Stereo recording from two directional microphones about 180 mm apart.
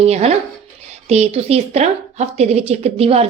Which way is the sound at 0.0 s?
35° right (ahead or behind).